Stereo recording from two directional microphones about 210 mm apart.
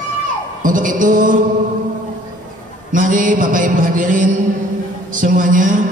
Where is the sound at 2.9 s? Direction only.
40° right (ahead or behind).